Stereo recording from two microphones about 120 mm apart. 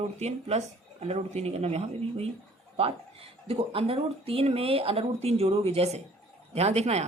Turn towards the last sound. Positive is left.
turn(degrees=-65)  # may be behind; listen again after turning